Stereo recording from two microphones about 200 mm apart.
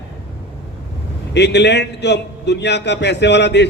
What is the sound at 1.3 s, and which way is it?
Speech, 60° left (ahead or behind).